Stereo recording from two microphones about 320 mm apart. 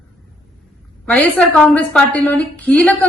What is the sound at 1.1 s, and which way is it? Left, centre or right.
A woman's voice, centre.